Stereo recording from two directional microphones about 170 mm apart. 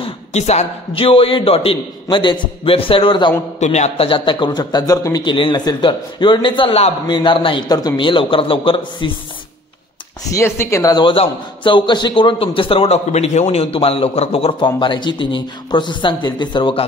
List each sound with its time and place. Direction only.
0.0 s a man's voice: 40° left (ahead or behind)
3.5 s a man's voice: 40° left (ahead or behind)
10.3 s a man's voice: 15° left (ahead or behind)